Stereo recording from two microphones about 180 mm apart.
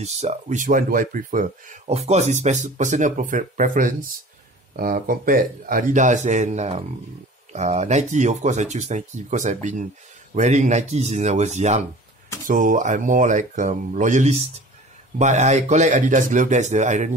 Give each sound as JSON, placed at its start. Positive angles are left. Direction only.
{"t": 0.0, "sound": "speech", "side_deg": -35}